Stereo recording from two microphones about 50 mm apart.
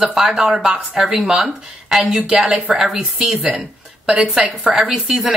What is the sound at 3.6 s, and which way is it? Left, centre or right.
Speech, centre.